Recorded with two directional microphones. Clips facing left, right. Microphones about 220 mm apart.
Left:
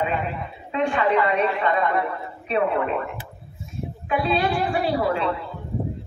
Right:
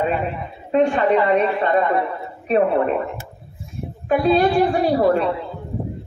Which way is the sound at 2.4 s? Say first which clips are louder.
Right 5 dB; 40° right (ahead or behind).